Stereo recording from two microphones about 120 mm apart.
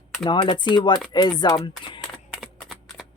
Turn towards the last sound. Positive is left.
turn(degrees=0)  # may be behind; listen again after turning